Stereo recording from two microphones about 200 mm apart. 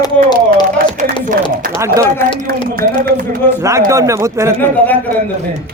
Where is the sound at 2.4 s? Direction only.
50° right (ahead or behind).